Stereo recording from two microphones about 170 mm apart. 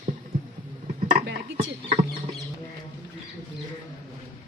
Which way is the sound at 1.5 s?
40° right (ahead or behind).